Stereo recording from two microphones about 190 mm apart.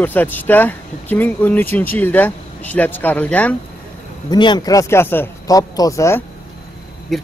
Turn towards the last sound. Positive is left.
turn(degrees=0)  # may be behind; listen again after turning